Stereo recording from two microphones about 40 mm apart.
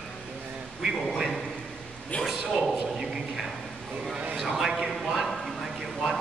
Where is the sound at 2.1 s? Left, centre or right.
Left.